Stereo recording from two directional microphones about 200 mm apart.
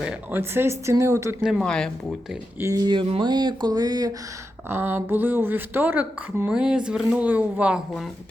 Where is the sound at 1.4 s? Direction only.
Centre (ahead or behind).